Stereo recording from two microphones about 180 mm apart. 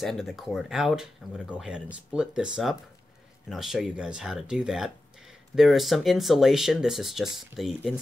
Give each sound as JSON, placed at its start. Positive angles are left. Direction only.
{"t": 0.0, "sound": "speech", "side_deg": 0}